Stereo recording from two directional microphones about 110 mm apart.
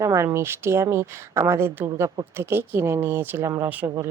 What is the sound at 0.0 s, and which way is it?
Speech, 30° right (ahead or behind).